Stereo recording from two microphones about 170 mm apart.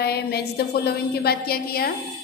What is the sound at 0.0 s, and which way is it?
Speech, 70° left (ahead or behind).